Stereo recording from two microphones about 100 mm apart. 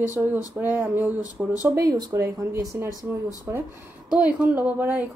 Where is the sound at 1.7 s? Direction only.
40° right (ahead or behind).